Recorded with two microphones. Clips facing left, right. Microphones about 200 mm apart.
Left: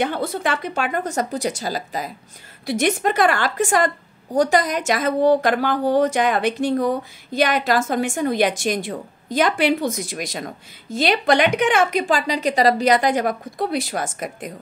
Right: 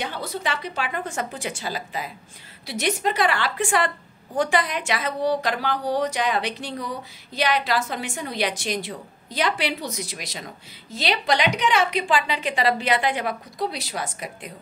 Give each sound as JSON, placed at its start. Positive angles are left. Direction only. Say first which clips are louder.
{"t": 0.0, "sound": "a woman's voice", "louder": "left 7 dB", "side_deg": 55}